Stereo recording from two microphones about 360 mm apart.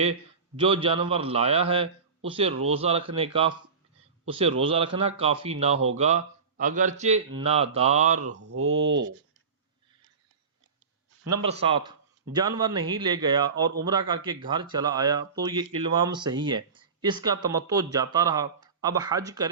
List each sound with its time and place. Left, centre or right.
0.0 s speech: centre
8.4 s speech: right
11.3 s speech: centre